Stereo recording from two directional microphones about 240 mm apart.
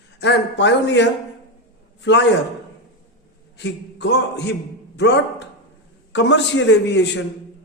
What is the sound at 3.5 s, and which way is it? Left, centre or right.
A man's voice, left.